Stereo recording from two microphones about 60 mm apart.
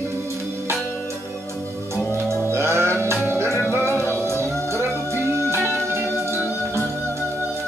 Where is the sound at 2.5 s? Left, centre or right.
Right.